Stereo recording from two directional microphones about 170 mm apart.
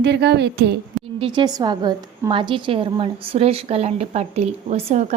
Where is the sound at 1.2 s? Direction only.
25° right (ahead or behind).